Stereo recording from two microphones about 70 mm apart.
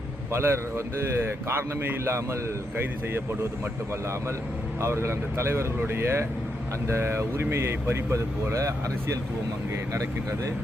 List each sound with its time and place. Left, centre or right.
0.3 s speech: right
4.8 s speech: right